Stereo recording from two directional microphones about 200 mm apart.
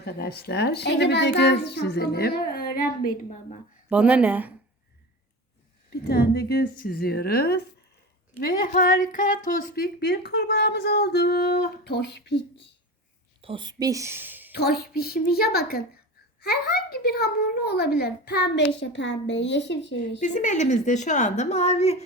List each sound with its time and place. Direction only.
0.0 s speech: 50° left (ahead or behind)
3.8 s speech: 5° right (ahead or behind)
5.9 s a woman's voice: 55° left (ahead or behind)
13.4 s a woman's voice: 25° right (ahead or behind); by 14.5 s 10° right (ahead or behind)
14.5 s a woman's voice: 50° left (ahead or behind)
20.0 s a woman's voice: 40° left (ahead or behind)